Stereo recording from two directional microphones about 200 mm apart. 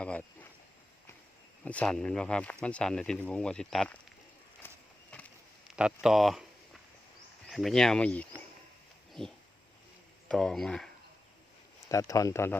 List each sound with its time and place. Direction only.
0.0 s a sound: 5° left (ahead or behind)
1.6 s speech: 5° left (ahead or behind)
4.6 s a sound: 10° left (ahead or behind)
5.7 s speech: 5° right (ahead or behind)
7.4 s speech: centre (ahead or behind)
11.9 s speech: 15° left (ahead or behind)